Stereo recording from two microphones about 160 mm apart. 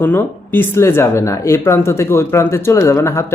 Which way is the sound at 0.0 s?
15° left (ahead or behind).